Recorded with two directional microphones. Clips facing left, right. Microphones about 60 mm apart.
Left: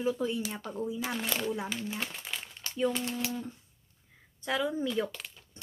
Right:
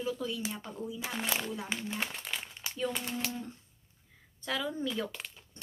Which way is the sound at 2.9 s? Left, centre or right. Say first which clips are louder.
Left 3 dB; centre.